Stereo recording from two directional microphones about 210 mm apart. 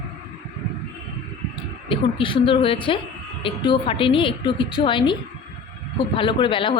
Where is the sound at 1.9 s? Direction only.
25° left (ahead or behind).